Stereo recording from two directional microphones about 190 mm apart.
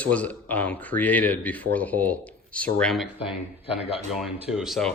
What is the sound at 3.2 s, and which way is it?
Speech, 30° left (ahead or behind).